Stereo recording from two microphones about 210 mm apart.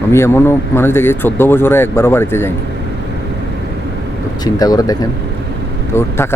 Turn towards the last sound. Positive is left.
turn(degrees=10)  # may be behind; listen again after turning